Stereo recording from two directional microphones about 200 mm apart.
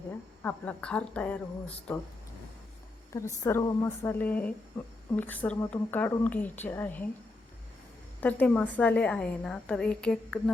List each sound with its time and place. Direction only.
0.4 s speech: 5° left (ahead or behind)
3.4 s speech: 15° left (ahead or behind)
8.2 s a woman's voice: 10° left (ahead or behind)